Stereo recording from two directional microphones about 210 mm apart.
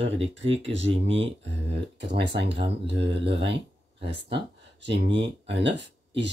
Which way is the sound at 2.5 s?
25° right (ahead or behind).